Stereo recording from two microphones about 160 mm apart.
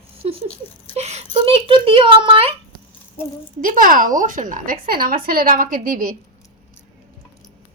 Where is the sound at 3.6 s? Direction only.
60° right (ahead or behind).